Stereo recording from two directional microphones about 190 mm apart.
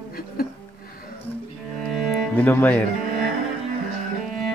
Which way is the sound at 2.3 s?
10° left (ahead or behind).